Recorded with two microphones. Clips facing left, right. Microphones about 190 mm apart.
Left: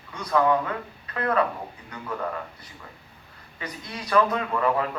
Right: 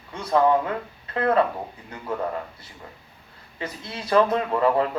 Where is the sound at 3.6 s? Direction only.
30° right (ahead or behind).